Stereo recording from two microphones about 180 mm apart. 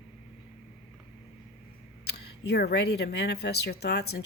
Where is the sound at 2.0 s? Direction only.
65° left (ahead or behind).